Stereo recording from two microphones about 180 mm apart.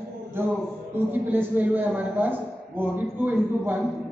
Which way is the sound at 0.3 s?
10° right (ahead or behind).